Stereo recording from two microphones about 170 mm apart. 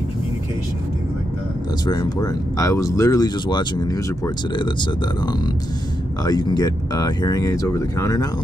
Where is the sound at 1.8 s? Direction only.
25° left (ahead or behind).